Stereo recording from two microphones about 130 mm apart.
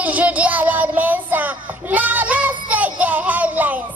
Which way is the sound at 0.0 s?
10° right (ahead or behind).